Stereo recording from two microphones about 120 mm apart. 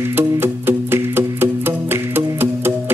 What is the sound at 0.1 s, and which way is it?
Music, 20° right (ahead or behind).